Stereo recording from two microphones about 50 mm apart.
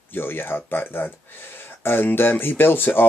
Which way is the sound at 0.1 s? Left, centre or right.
Left.